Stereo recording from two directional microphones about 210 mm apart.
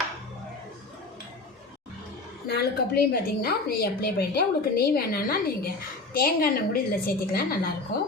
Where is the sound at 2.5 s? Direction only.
50° left (ahead or behind).